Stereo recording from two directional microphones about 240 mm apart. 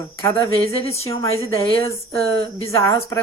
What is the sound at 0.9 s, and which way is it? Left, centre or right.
A woman's voice, centre.